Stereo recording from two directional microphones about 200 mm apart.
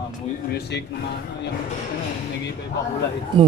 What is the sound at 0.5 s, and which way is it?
Speech, 55° left (ahead or behind).